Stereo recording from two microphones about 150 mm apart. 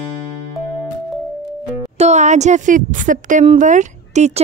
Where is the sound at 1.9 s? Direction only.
50° right (ahead or behind).